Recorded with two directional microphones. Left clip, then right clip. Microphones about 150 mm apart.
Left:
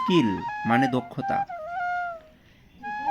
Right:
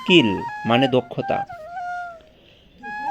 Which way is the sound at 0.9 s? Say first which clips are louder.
Right 6 dB; centre (ahead or behind).